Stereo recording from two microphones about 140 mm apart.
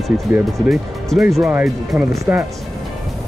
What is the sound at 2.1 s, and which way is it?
Speech, 20° right (ahead or behind).